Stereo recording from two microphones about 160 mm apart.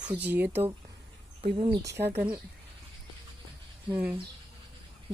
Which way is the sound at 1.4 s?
35° right (ahead or behind).